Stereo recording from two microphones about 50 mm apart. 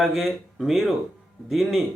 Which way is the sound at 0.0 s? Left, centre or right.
Centre.